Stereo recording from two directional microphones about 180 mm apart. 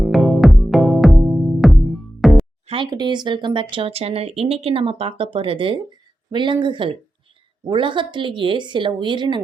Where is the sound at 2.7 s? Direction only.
25° right (ahead or behind).